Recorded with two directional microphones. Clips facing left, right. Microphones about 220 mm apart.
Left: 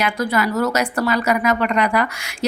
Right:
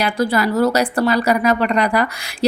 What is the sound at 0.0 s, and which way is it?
A woman's voice, 35° right (ahead or behind).